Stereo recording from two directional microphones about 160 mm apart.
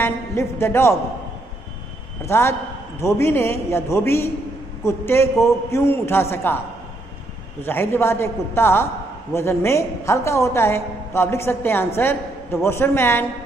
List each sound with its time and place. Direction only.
0.0 s a man's voice: 15° left (ahead or behind)
2.2 s a man's voice: 15° left (ahead or behind)
7.6 s a man's voice: 15° left (ahead or behind)